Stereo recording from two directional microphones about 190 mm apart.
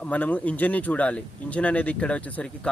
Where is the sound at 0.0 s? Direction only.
5° left (ahead or behind).